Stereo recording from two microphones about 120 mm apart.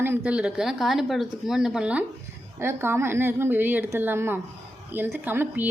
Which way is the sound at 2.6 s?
20° right (ahead or behind).